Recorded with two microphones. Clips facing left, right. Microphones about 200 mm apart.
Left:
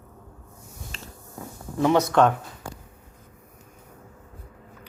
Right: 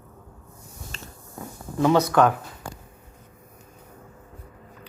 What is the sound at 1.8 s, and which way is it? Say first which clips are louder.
Speech: even; 20° left (ahead or behind).